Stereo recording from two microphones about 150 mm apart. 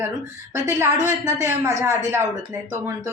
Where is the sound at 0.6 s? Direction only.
20° right (ahead or behind).